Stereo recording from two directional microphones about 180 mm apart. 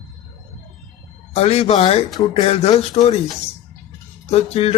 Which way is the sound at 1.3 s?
35° left (ahead or behind).